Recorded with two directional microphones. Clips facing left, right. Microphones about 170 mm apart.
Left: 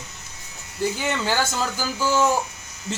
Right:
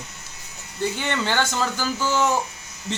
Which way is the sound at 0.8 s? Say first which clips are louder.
Left 1 dB; 10° left (ahead or behind).